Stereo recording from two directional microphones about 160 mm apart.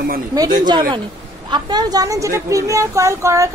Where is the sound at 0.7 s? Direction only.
25° right (ahead or behind).